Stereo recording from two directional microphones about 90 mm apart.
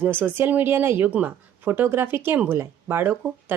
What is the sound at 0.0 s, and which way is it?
A woman's voice, 20° right (ahead or behind).